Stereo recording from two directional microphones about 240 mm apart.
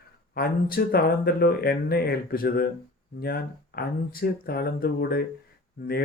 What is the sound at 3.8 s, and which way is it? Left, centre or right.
Speech, left.